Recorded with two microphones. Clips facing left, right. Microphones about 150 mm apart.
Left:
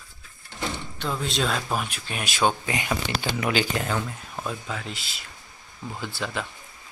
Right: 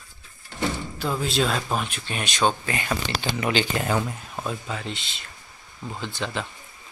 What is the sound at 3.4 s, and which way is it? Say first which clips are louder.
Speech: right 1 dB; centre (ahead or behind).